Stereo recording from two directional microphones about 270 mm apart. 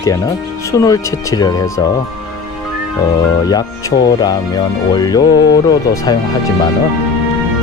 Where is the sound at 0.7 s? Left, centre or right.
Centre.